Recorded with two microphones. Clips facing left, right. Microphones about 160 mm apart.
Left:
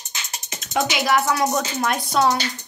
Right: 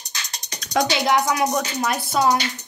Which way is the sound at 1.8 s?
5° right (ahead or behind).